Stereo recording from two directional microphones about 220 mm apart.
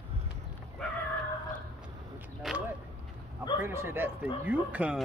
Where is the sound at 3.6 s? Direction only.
10° right (ahead or behind).